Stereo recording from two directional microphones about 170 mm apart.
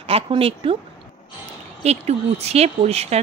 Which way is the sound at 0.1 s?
35° right (ahead or behind).